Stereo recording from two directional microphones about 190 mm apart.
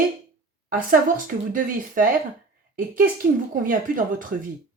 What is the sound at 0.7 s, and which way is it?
Speech, 45° right (ahead or behind).